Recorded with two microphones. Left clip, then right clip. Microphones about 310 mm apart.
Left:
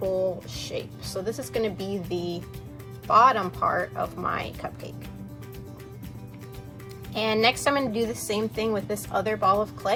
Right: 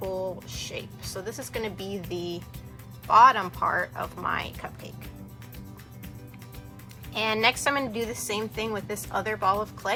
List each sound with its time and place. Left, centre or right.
0.6 s a woman's voice: centre
7.2 s a woman's voice: centre